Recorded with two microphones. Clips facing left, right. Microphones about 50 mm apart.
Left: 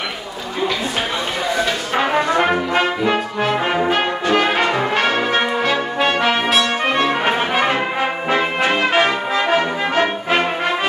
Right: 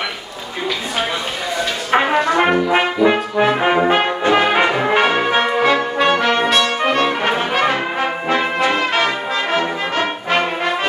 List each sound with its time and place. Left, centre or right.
2.0 s brass instrument: centre
2.7 s brass instrument: centre